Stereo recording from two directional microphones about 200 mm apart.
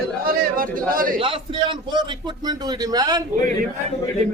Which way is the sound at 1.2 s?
25° right (ahead or behind).